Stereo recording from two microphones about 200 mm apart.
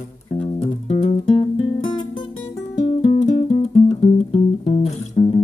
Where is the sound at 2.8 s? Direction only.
35° left (ahead or behind).